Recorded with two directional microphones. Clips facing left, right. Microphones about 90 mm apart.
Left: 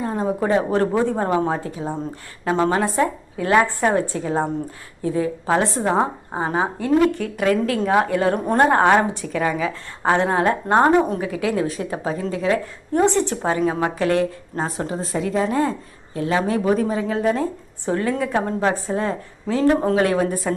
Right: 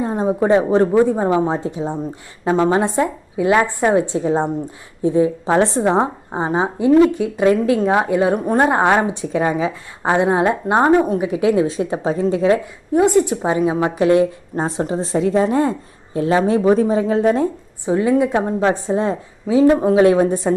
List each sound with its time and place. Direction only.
0.0 s a woman's voice: 20° right (ahead or behind)
10.0 s a woman's voice: 15° right (ahead or behind)
12.9 s a woman's voice: 10° right (ahead or behind); by 17.4 s 25° right (ahead or behind)
17.8 s speech: 15° right (ahead or behind)
19.5 s a woman's voice: 10° right (ahead or behind); by 20.5 s 25° right (ahead or behind)